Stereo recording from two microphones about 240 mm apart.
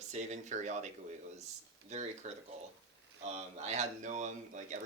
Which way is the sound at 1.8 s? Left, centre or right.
Right.